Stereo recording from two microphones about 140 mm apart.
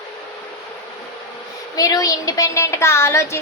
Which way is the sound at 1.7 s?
25° left (ahead or behind).